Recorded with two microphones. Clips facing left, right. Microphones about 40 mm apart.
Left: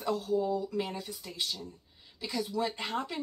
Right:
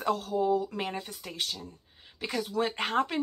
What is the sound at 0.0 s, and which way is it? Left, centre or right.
Speech, right.